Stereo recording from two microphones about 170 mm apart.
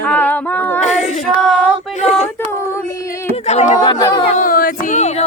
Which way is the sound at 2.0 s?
45° left (ahead or behind).